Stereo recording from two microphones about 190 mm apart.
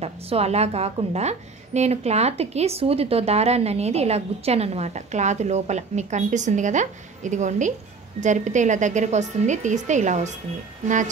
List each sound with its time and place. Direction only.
0.0 s a woman's voice: 35° right (ahead or behind)